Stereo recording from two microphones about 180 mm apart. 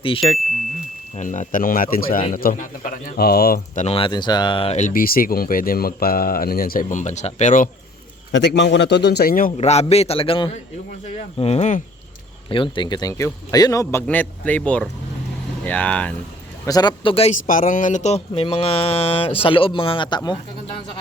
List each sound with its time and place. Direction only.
0.0 s mantra: 30° left (ahead or behind)
1.1 s speech: 45° left (ahead or behind)
3.8 s a man's voice: 30° left (ahead or behind)
4.9 s speech: 50° left (ahead or behind)
8.3 s a man's voice: 75° left (ahead or behind); by 9.5 s 55° left (ahead or behind)
9.6 s mantra: 35° left (ahead or behind)
12.5 s a man's voice: 30° left (ahead or behind); by 16.1 s 5° left (ahead or behind)
16.6 s a man's voice: 20° left (ahead or behind)
17.4 s mantra: 50° left (ahead or behind); by 20.3 s 25° left (ahead or behind)